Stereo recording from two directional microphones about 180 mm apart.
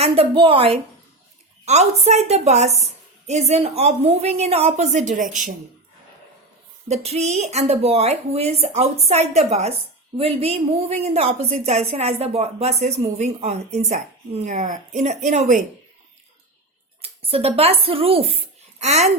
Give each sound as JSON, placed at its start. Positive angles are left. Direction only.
{"t": 0.0, "sound": "a woman's voice", "side_deg": -30}
{"t": 6.8, "sound": "a woman's voice", "side_deg": -35}
{"t": 17.0, "sound": "speech", "side_deg": -35}